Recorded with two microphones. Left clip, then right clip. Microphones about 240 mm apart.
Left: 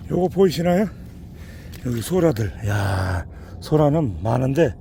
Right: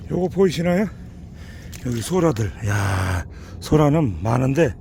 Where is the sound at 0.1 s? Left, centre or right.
Centre.